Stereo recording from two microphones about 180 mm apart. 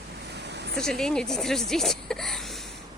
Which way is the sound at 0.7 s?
5° left (ahead or behind).